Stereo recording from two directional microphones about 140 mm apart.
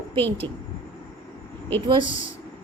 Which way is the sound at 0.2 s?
15° left (ahead or behind).